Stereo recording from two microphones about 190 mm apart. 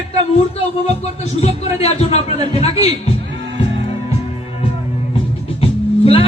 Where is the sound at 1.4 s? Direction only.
35° left (ahead or behind).